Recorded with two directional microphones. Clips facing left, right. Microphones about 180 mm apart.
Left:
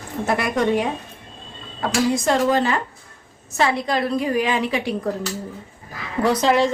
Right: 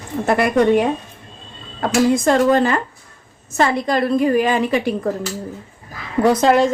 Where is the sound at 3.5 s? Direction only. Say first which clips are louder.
Right 3 dB; 45° right (ahead or behind).